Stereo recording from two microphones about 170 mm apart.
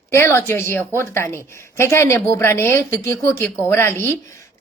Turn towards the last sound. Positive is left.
turn(degrees=15)  # may be behind; listen again after turning